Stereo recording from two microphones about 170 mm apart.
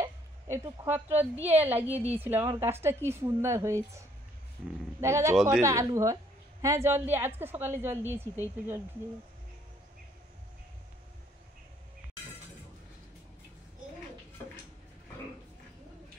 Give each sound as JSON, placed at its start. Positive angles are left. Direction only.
{"t": 0.0, "sound": "a sound", "side_deg": -15}
{"t": 1.4, "sound": "a woman's voice", "side_deg": -10}
{"t": 5.0, "sound": "a woman's voice", "side_deg": -15}